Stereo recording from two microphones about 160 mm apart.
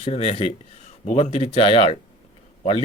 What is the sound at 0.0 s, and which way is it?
Speech, 35° left (ahead or behind).